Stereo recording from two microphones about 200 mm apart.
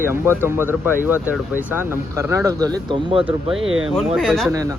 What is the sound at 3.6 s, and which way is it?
Speech, 85° right.